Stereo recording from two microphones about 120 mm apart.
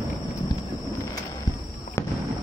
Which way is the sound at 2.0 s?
20° left (ahead or behind).